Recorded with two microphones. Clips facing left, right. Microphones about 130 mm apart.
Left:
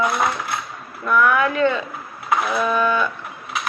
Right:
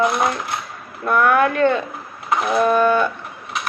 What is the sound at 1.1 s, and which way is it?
A woman's voice, 50° right (ahead or behind).